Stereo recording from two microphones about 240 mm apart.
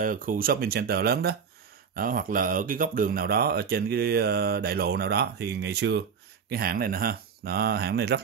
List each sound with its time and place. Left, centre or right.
0.0 s speech: right